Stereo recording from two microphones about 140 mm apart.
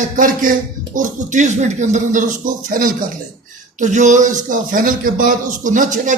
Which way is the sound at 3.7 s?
60° right (ahead or behind).